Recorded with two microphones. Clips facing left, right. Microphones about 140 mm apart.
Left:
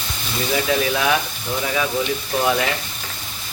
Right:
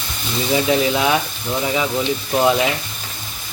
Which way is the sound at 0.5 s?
20° right (ahead or behind).